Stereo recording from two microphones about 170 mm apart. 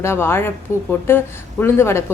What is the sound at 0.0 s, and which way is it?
A woman's voice, 15° left (ahead or behind).